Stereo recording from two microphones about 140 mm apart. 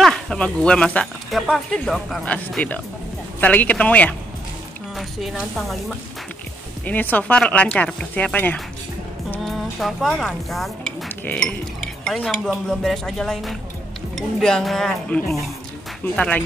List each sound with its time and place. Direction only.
0.0 s speech: 5° left (ahead or behind)
6.9 s speech: 10° left (ahead or behind)